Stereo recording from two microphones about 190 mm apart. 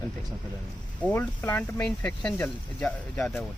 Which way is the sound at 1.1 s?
10° left (ahead or behind).